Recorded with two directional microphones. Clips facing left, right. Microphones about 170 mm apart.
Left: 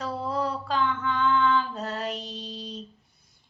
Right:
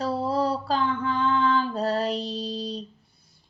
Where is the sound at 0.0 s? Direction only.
35° right (ahead or behind).